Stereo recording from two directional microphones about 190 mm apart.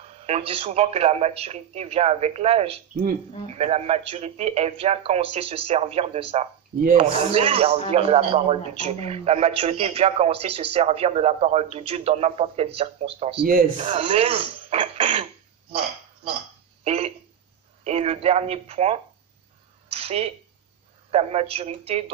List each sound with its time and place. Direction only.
0.3 s a man's voice: 30° right (ahead or behind)
6.8 s speech: 45° right (ahead or behind)
7.2 s a man's voice: 30° right (ahead or behind)
13.4 s speech: 50° right (ahead or behind)
13.7 s a man's voice: 30° right (ahead or behind)
16.8 s a sound: 35° right (ahead or behind)
21.1 s a man's voice: 35° right (ahead or behind)